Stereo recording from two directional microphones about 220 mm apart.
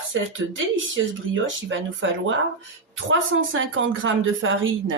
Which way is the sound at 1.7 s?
60° right (ahead or behind).